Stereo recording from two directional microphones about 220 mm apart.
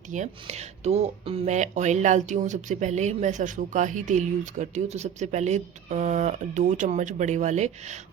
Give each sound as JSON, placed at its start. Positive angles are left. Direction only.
{"t": 0.1, "sound": "speech", "side_deg": -30}